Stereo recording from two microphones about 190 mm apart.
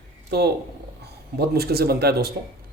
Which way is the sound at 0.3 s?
60° right (ahead or behind).